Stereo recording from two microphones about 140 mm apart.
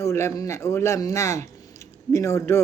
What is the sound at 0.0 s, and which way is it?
Speech, 20° left (ahead or behind).